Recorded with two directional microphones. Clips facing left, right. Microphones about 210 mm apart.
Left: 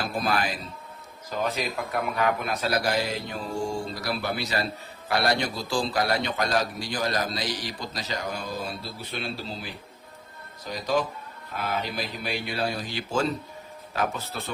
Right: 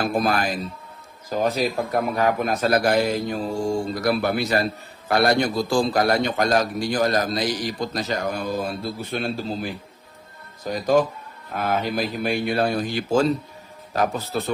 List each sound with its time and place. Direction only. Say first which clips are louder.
0.0 s a man's voice: right 5 dB; 45° right (ahead or behind)